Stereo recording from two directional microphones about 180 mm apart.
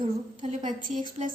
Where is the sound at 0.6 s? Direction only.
45° right (ahead or behind).